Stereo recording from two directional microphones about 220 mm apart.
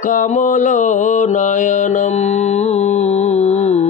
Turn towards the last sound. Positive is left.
turn(degrees=30)  # may be behind; listen again after turning